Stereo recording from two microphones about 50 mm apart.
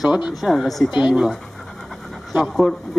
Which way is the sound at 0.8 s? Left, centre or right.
Centre.